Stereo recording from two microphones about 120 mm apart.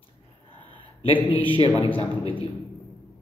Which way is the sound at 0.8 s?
50° left (ahead or behind).